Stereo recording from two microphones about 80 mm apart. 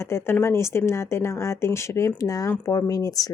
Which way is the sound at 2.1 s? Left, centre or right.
Left.